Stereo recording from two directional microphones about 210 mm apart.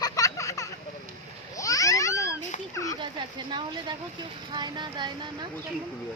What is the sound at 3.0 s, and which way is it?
Speech, 20° right (ahead or behind).